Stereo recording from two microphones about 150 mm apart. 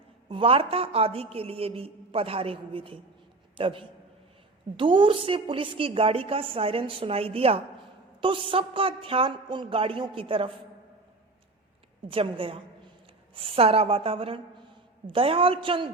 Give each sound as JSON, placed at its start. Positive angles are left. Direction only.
{"t": 0.3, "sound": "a woman's voice", "side_deg": -35}
{"t": 12.0, "sound": "a woman's voice", "side_deg": -35}